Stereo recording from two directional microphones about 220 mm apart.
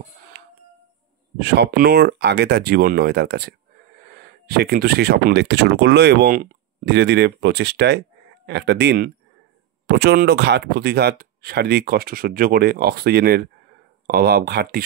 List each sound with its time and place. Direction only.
1.4 s speech: 45° right (ahead or behind)